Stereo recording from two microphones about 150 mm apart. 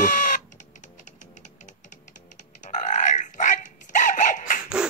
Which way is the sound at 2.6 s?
55° left (ahead or behind).